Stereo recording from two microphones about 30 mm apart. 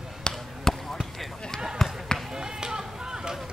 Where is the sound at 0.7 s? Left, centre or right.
Centre.